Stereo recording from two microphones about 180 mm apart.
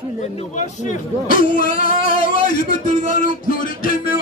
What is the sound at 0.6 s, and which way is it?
Speech, 45° left (ahead or behind).